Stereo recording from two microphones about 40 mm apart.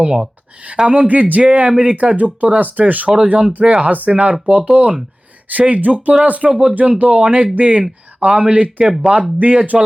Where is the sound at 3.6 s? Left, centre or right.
Right.